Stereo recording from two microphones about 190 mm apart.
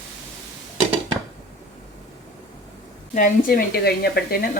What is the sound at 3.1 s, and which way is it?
Speech, 45° left (ahead or behind).